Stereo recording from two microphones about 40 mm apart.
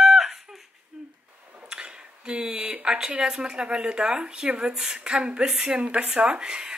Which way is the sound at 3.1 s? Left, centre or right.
Right.